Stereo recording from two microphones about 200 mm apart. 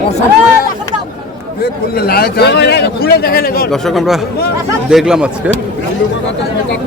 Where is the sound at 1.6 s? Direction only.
50° left (ahead or behind).